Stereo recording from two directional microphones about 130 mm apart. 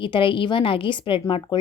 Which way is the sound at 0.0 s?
40° left (ahead or behind).